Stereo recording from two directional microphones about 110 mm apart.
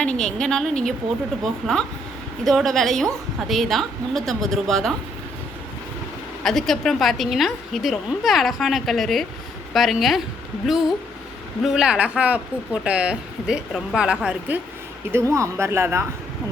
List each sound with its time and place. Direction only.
0.0 s a woman's voice: 10° left (ahead or behind)
6.4 s a woman's voice: 5° left (ahead or behind); by 14.6 s 15° right (ahead or behind)
15.1 s speech: 25° right (ahead or behind)